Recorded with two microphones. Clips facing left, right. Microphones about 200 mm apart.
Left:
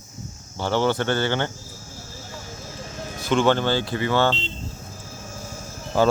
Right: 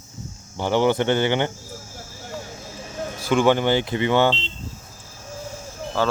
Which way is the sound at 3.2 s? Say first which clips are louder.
Right 1 dB; 10° right (ahead or behind).